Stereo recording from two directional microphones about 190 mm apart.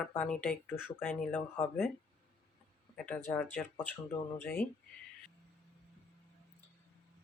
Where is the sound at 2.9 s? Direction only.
5° left (ahead or behind).